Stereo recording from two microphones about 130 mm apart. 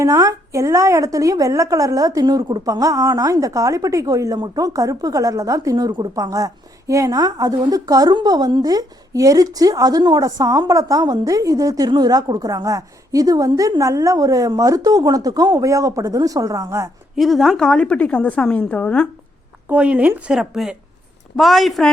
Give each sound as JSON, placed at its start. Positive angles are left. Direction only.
{"t": 0.0, "sound": "a woman's voice", "side_deg": -25}
{"t": 17.2, "sound": "a woman's voice", "side_deg": 0}
{"t": 19.6, "sound": "a woman's voice", "side_deg": -10}